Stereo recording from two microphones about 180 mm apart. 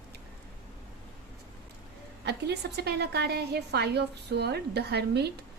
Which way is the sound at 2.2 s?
65° right (ahead or behind).